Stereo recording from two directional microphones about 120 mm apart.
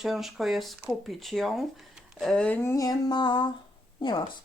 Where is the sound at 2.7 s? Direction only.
30° left (ahead or behind).